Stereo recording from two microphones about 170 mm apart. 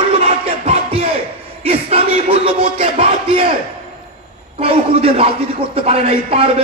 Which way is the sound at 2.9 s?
35° right (ahead or behind).